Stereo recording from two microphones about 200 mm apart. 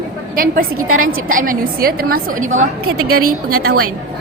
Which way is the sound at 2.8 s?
90° right.